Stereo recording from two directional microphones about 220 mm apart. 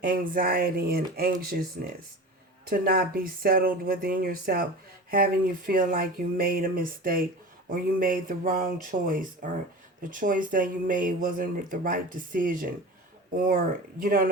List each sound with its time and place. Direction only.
0.0 s speech: 40° right (ahead or behind)